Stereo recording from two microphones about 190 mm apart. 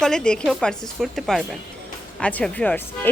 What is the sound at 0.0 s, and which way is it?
Speech, centre (ahead or behind).